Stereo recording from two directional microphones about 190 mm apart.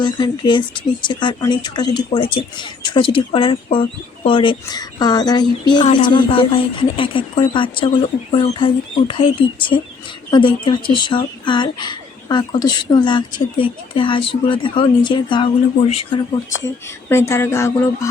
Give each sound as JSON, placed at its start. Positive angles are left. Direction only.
{"t": 0.0, "sound": "speech", "side_deg": 25}
{"t": 16.6, "sound": "speech", "side_deg": 15}